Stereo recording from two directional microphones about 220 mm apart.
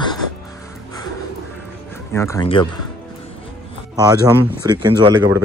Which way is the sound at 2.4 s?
25° left (ahead or behind).